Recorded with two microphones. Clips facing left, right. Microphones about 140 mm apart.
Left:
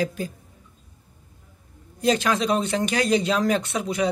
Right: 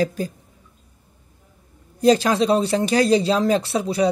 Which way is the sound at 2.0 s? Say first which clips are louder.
Right 5 dB; 35° right (ahead or behind).